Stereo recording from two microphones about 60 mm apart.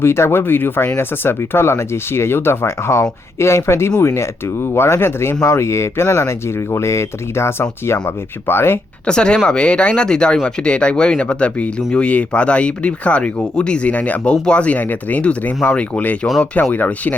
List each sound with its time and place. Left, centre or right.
0.0 s speech: left
9.0 s speech: centre